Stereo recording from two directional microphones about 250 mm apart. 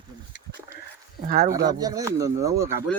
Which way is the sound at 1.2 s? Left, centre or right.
Right.